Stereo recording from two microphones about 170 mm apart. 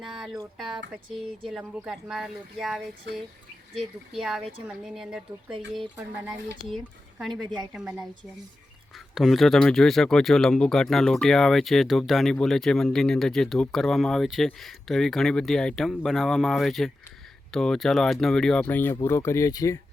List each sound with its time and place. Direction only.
0.0 s a sound: centre (ahead or behind)
0.5 s speech: centre (ahead or behind)
6.7 s speech: centre (ahead or behind)
9.1 s speech: centre (ahead or behind); by 19.8 s 20° left (ahead or behind)